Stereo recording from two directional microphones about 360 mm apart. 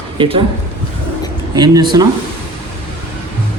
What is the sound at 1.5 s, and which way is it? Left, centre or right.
Speech, centre.